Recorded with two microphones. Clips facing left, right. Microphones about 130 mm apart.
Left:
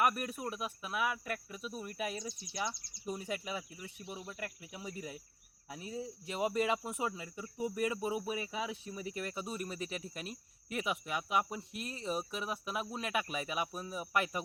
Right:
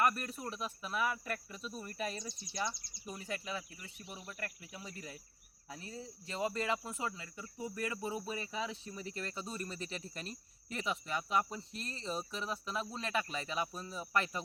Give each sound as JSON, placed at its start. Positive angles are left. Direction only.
{"t": 0.0, "sound": "speech", "side_deg": 10}
{"t": 3.1, "sound": "speech", "side_deg": 15}